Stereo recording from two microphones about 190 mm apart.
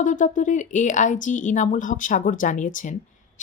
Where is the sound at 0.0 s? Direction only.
40° left (ahead or behind).